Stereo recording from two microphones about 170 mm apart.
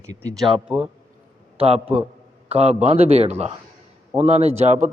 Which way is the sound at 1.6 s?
35° right (ahead or behind).